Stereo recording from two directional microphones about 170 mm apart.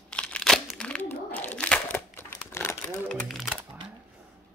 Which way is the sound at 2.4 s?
15° left (ahead or behind).